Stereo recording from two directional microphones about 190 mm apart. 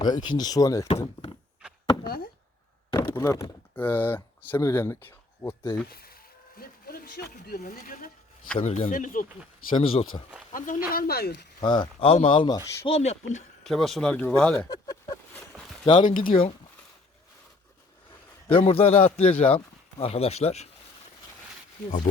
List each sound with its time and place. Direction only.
0.0 s speech: 25° left (ahead or behind)
1.6 s a sound: 5° right (ahead or behind)
2.0 s a sound: 50° left (ahead or behind)
3.1 s speech: 15° left (ahead or behind)
5.9 s speech: 50° left (ahead or behind)
8.5 s a man's voice: 35° left (ahead or behind)
9.6 s speech: 30° left (ahead or behind)
10.5 s speech: 45° left (ahead or behind)
11.6 s speech: 25° left (ahead or behind)
13.7 s speech: centre (ahead or behind)
14.7 s a sound: 20° left (ahead or behind)
15.9 s speech: 25° left (ahead or behind)
18.4 s a man's voice: 30° left (ahead or behind)